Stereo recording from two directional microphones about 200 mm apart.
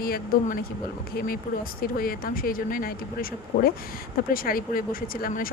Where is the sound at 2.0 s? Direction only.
45° left (ahead or behind).